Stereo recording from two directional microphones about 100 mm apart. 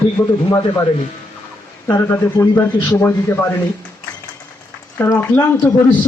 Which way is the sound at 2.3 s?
40° left (ahead or behind).